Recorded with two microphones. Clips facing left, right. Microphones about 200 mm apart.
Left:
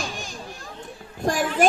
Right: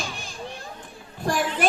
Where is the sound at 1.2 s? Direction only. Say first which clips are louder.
Left 3 dB; 45° left (ahead or behind).